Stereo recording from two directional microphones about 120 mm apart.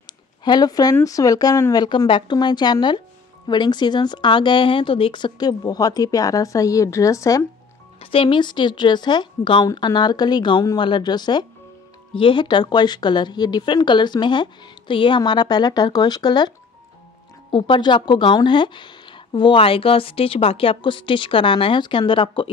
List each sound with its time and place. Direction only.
0.0 s a sound: 35° left (ahead or behind)
1.0 s a woman's voice: 30° left (ahead or behind)
8.0 s a woman's voice: 50° left (ahead or behind)